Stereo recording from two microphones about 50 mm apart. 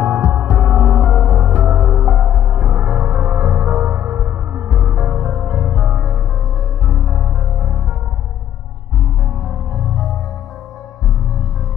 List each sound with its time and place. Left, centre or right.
0.0 s music: right
1.2 s music: right; by 6.1 s centre
6.9 s music: right